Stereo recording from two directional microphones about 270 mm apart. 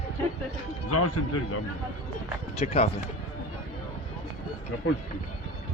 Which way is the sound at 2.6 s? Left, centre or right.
Left.